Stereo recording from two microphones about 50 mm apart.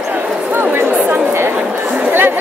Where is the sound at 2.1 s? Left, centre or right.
Right.